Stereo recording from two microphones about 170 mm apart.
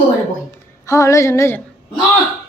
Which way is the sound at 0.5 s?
15° left (ahead or behind).